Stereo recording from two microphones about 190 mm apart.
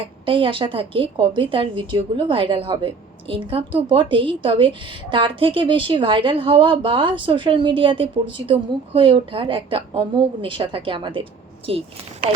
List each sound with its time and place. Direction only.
0.3 s a woman's voice: 25° right (ahead or behind)